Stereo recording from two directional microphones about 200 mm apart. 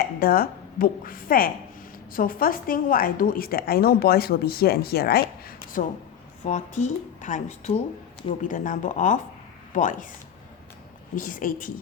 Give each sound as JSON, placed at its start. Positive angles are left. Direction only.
{"t": 0.0, "sound": "a woman's voice", "side_deg": 50}
{"t": 6.4, "sound": "speech", "side_deg": 35}
{"t": 11.1, "sound": "a woman's voice", "side_deg": 45}